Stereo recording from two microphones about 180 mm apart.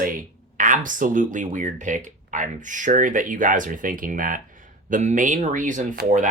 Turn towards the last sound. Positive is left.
turn(degrees=-45)  # may be behind; listen again after turning